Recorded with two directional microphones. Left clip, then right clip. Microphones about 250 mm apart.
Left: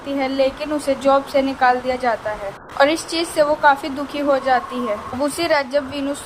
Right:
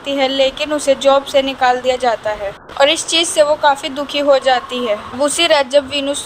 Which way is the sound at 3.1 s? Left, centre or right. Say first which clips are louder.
Right 5 dB; right.